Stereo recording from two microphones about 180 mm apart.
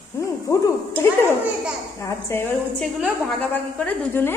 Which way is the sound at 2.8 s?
5° left (ahead or behind).